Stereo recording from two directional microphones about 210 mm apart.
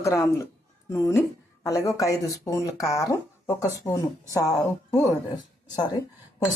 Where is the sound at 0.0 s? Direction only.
15° left (ahead or behind).